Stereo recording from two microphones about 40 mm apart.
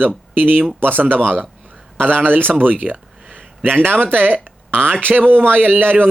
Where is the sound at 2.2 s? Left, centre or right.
Right.